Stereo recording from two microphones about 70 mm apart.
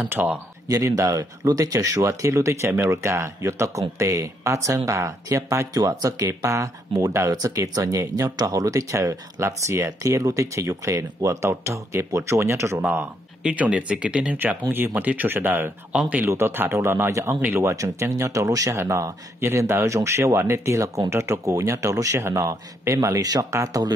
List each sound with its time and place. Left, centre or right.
0.2 s speech: right
0.7 s speech: right
13.4 s speech: centre; by 15.7 s right
15.9 s speech: centre
16.3 s speech: right